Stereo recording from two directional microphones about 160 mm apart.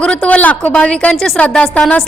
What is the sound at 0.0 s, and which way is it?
A woman's voice, 5° left (ahead or behind).